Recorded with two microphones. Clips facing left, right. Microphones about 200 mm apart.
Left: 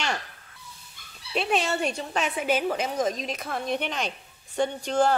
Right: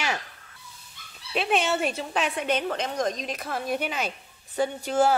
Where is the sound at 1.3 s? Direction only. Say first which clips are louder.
Right 1 dB; centre (ahead or behind).